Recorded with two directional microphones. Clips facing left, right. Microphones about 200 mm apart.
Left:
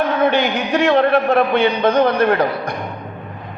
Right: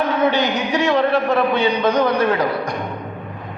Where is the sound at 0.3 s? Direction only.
55° left (ahead or behind).